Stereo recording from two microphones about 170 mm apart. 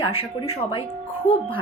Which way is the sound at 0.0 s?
35° left (ahead or behind).